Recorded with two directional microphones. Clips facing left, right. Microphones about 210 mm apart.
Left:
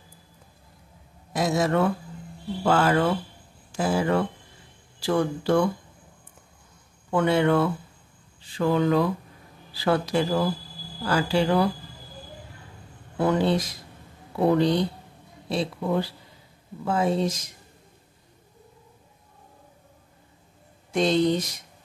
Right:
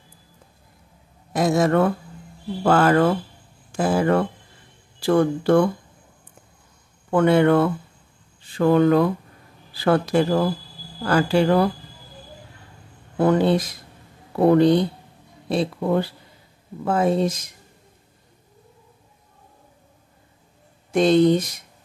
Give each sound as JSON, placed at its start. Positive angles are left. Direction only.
{"t": 1.3, "sound": "a man's voice", "side_deg": -55}
{"t": 7.1, "sound": "a man's voice", "side_deg": -55}
{"t": 13.2, "sound": "a man's voice", "side_deg": -55}
{"t": 20.9, "sound": "speech", "side_deg": -55}